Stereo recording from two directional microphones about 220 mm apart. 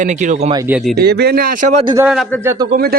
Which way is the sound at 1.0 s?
45° right (ahead or behind).